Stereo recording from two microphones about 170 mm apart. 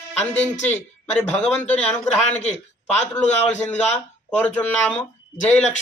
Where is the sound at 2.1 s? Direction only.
40° left (ahead or behind).